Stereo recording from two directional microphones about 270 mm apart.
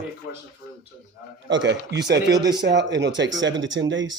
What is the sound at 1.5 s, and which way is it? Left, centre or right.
Speech, right.